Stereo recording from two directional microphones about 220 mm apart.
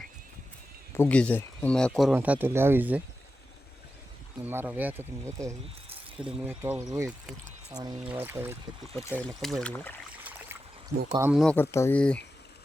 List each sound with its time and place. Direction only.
0.9 s speech: 5° left (ahead or behind); by 3.0 s 10° right (ahead or behind)
4.4 s speech: 10° right (ahead or behind)
9.4 s speech: centre (ahead or behind)
10.2 s a sound: 10° right (ahead or behind)
11.1 s speech: 10° right (ahead or behind)
11.3 s speech: 5° left (ahead or behind)